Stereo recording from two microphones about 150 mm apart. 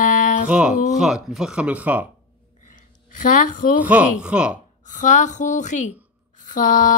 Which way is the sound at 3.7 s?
10° right (ahead or behind).